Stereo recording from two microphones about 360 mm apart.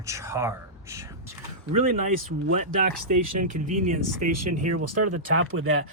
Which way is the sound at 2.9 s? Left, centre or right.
Right.